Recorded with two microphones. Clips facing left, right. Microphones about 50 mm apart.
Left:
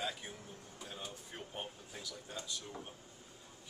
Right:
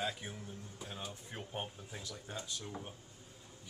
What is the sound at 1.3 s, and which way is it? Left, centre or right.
Speech, centre.